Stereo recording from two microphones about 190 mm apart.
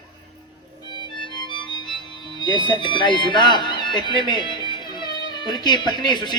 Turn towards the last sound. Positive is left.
turn(degrees=25)  # may be behind; listen again after turning